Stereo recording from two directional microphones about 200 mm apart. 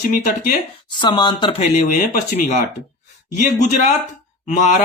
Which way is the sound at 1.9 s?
40° left (ahead or behind).